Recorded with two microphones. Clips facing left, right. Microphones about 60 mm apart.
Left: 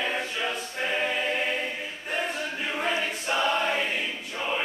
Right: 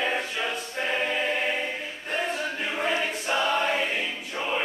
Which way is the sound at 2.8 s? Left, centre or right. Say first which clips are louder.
Right 2 dB; centre.